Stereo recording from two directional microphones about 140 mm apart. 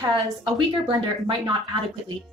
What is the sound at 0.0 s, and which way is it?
Speech, 30° right (ahead or behind).